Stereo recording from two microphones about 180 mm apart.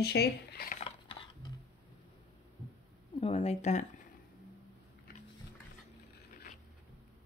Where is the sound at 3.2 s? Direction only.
35° left (ahead or behind).